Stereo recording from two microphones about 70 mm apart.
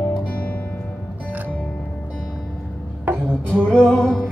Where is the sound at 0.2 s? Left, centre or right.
Centre.